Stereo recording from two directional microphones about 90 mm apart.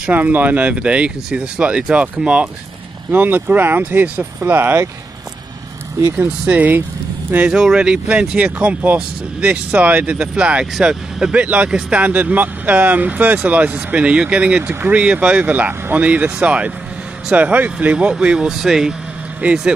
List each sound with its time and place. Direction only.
0.0 s speech: 20° right (ahead or behind)
6.1 s speech: 15° right (ahead or behind)